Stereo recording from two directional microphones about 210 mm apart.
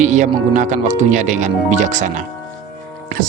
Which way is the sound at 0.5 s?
35° right (ahead or behind).